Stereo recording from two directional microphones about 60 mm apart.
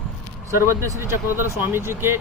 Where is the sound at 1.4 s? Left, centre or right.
Right.